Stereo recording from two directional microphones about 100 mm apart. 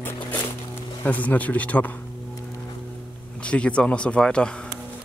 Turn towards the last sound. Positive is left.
turn(degrees=10)  # may be behind; listen again after turning